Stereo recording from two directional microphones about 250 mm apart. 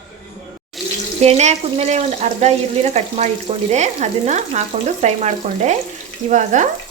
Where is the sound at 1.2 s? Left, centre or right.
Right.